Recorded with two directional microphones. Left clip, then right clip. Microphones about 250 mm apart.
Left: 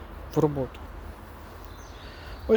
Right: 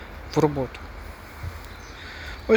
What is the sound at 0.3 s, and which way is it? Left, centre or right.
Speech, centre.